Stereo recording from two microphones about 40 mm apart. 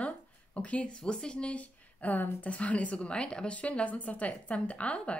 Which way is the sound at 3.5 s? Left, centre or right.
Left.